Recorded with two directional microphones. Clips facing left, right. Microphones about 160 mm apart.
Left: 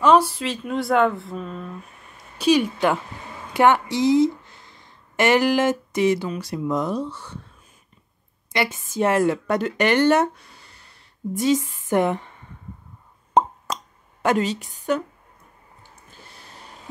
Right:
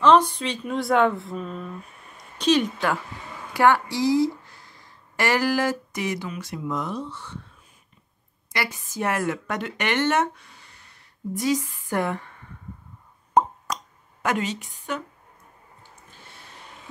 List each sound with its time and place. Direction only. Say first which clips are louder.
0.0 s a woman's voice: left 1 dB; 10° left (ahead or behind)
3.5 s speech: left 2 dB; 20° left (ahead or behind); by 7.3 s 40° left (ahead or behind)
8.5 s speech: left 6 dB; 25° left (ahead or behind)
13.4 s plop: left 1 dB; 25° left (ahead or behind)
14.2 s speech: left 5 dB; 30° left (ahead or behind)